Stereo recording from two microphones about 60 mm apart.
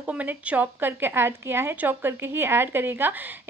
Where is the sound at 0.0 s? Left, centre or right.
Right.